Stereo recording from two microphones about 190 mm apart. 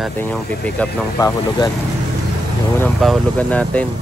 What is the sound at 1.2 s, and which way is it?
Speech, 20° left (ahead or behind).